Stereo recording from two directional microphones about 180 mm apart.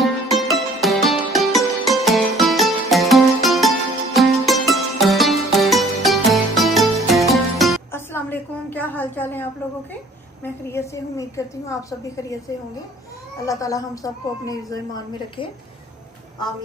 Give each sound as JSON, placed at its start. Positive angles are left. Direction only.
{"t": 0.0, "sound": "music", "side_deg": 0}
{"t": 7.9, "sound": "a sound", "side_deg": 10}
{"t": 13.5, "sound": "speech", "side_deg": 20}